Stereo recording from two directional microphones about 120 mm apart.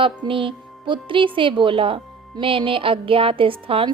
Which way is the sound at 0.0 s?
45° right (ahead or behind).